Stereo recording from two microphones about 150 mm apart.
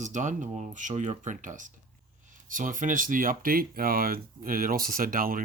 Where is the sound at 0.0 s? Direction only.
55° right (ahead or behind).